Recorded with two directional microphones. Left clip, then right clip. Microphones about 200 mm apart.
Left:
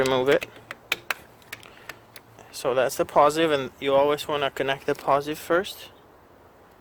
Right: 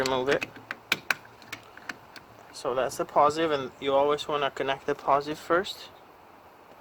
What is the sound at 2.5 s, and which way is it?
Speech, 40° left (ahead or behind).